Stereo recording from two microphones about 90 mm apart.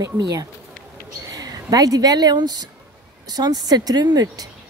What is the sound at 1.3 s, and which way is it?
Speech, 45° right (ahead or behind).